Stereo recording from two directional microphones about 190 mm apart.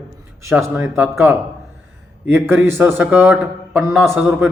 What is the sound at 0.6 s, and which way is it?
A man's voice, 10° right (ahead or behind).